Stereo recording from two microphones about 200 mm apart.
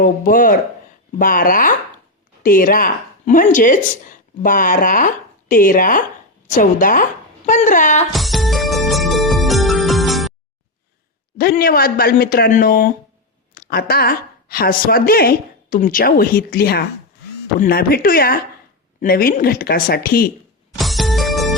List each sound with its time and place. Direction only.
0.0 s a woman's voice: 45° left (ahead or behind)
8.1 s music: centre (ahead or behind)
11.3 s a woman's voice: 50° left (ahead or behind)
20.7 s music: centre (ahead or behind)